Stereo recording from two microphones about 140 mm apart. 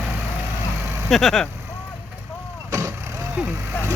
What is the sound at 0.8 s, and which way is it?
Vehicle, 15° right (ahead or behind).